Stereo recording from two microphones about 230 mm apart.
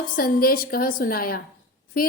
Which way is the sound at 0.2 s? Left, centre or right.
Left.